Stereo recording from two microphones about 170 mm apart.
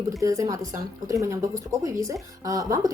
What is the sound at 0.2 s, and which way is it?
A woman's voice, 20° right (ahead or behind).